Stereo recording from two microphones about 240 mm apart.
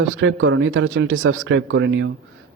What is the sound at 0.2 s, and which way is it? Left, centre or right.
A man's voice, right.